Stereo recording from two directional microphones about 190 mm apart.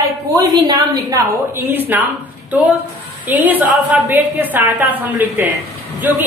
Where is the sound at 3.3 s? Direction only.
10° right (ahead or behind).